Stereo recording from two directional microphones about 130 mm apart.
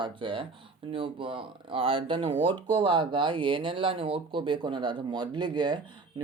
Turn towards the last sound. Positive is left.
turn(degrees=-35)  # may be behind; listen again after turning